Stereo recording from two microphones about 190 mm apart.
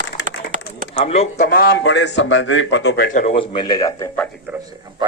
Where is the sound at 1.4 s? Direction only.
50° left (ahead or behind).